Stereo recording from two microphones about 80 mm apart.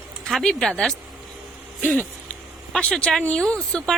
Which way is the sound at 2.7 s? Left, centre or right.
Centre.